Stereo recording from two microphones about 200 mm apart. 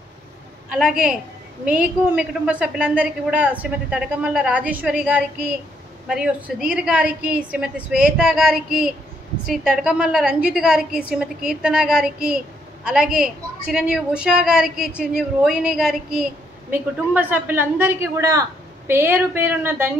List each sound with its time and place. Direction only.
0.7 s a woman's voice: 5° right (ahead or behind)